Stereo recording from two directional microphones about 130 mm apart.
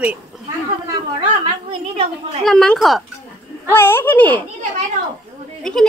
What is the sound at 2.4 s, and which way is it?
Speech, 5° left (ahead or behind).